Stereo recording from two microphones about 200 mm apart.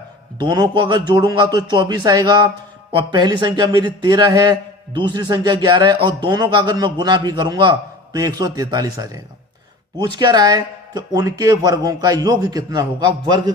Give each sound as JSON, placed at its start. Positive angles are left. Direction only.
{"t": 0.4, "sound": "a man's voice", "side_deg": -20}